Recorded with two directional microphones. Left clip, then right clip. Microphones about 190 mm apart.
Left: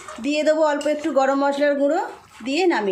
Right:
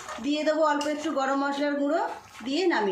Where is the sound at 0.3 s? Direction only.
35° left (ahead or behind).